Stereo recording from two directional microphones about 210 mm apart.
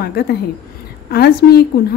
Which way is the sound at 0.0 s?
50° left (ahead or behind).